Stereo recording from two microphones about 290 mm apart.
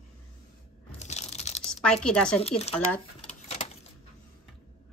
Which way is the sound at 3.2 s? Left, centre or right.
Left.